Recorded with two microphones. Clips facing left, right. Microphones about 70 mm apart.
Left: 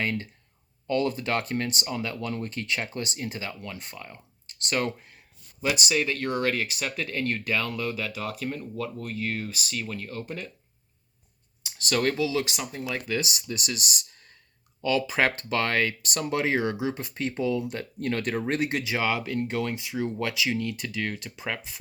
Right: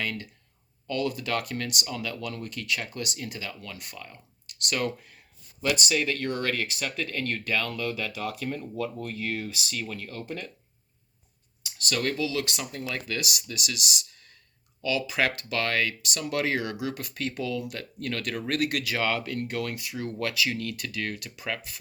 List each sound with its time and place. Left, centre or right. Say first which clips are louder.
0.0 s speech: left 4 dB; left
5.6 s speech: even; centre
11.8 s speech: left 3 dB; left; by 13.1 s centre
13.1 s speech: left 3 dB; left
16.3 s speech: left 2 dB; left